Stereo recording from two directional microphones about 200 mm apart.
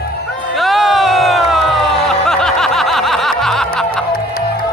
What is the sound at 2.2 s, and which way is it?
Music, centre (ahead or behind).